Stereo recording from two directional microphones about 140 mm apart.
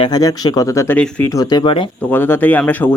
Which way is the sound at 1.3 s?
30° left (ahead or behind).